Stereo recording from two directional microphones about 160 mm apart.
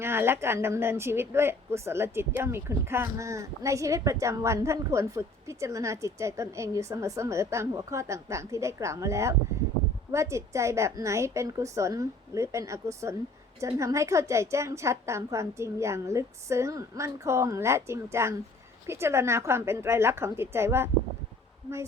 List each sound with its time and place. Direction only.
0.0 s a woman's voice: 15° right (ahead or behind)